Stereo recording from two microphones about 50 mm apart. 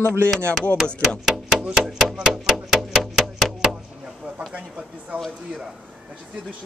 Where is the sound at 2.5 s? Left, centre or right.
Centre.